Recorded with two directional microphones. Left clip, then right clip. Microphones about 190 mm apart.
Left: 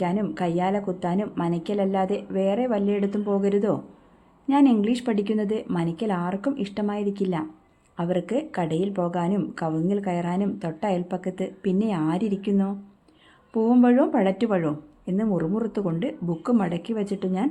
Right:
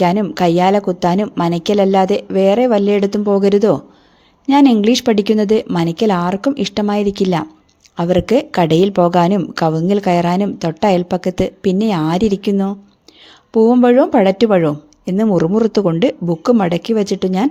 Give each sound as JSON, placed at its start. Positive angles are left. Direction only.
{"t": 0.0, "sound": "speech", "side_deg": -40}